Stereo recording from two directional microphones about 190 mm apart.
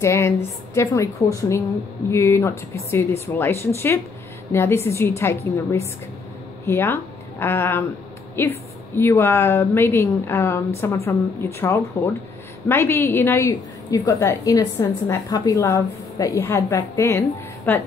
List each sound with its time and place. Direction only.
0.0 s a woman's voice: 15° left (ahead or behind)